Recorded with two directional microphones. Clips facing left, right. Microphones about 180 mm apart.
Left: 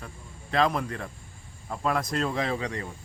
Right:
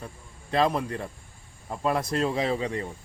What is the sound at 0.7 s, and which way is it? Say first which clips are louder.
Speech: right 1 dB; 30° right (ahead or behind).